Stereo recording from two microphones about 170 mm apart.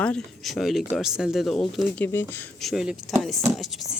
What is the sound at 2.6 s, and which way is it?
Speech, centre (ahead or behind).